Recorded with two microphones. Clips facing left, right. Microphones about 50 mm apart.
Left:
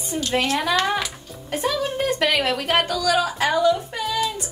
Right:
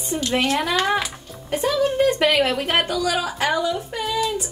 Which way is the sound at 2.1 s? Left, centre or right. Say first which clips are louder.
Right 2 dB; centre.